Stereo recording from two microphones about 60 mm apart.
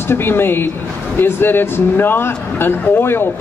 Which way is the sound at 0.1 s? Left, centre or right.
Left.